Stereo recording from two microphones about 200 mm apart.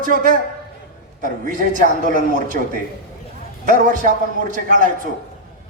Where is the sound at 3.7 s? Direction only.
40° right (ahead or behind).